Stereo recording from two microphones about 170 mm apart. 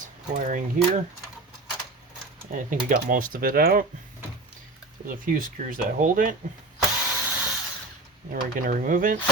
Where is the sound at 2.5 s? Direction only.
50° right (ahead or behind).